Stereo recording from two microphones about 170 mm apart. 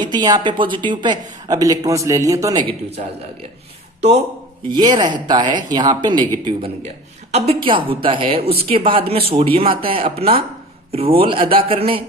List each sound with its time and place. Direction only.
0.0 s speech: 25° right (ahead or behind)
2.6 s a woman's voice: 35° right (ahead or behind)
4.7 s speech: 25° right (ahead or behind)
7.3 s a woman's voice: 35° right (ahead or behind)